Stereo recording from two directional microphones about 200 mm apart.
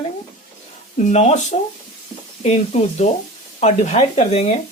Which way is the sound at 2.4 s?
35° left (ahead or behind).